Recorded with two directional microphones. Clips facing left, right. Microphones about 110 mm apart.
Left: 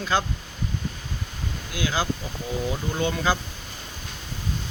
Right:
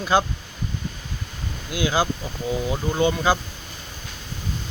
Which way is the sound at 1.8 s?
15° right (ahead or behind).